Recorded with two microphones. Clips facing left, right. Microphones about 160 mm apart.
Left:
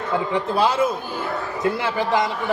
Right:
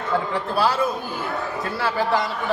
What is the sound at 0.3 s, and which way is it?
A man's voice, 20° left (ahead or behind).